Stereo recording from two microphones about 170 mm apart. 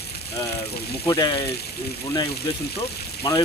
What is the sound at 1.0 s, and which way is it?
Speech, 25° left (ahead or behind).